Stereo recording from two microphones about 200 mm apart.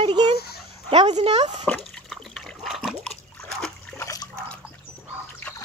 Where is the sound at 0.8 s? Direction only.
30° right (ahead or behind).